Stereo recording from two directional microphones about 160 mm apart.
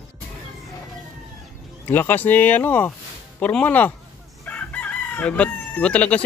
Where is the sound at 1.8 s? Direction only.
10° left (ahead or behind).